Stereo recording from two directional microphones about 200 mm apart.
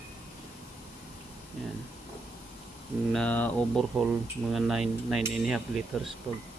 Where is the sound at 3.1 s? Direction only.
5° left (ahead or behind).